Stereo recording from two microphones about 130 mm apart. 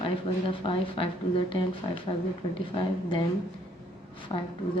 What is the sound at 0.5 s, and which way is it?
Speech, 40° left (ahead or behind).